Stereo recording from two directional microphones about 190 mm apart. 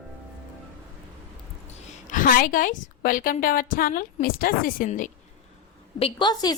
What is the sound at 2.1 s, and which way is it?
A woman's voice, 45° left (ahead or behind).